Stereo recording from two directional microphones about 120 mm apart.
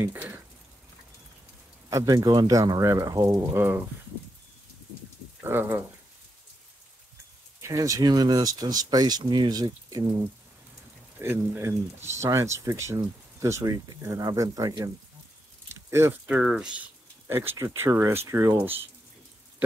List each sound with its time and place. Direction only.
0.0 s speech: 15° right (ahead or behind)
1.9 s speech: 30° right (ahead or behind)
3.3 s speech: 20° right (ahead or behind)
5.4 s speech: 15° right (ahead or behind)
7.6 s speech: 25° right (ahead or behind)
11.1 s speech: 20° right (ahead or behind)
15.9 s speech: 20° right (ahead or behind)
17.3 s speech: 20° right (ahead or behind)